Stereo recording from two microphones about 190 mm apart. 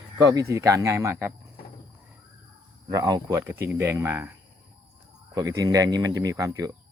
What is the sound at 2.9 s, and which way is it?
Speech, 20° right (ahead or behind).